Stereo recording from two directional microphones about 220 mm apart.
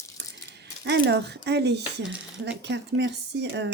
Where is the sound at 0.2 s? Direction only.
50° right (ahead or behind).